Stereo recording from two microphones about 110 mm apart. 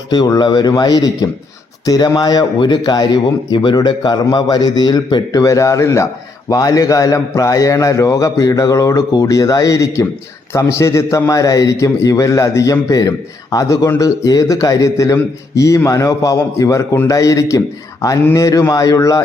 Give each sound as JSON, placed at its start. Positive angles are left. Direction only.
{"t": 0.1, "sound": "a man's voice", "side_deg": 40}